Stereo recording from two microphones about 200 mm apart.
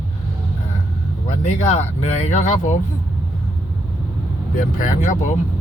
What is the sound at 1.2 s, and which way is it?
Speech, 35° left (ahead or behind).